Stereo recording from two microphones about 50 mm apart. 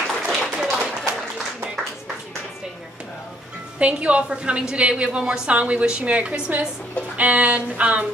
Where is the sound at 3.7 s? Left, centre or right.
Right.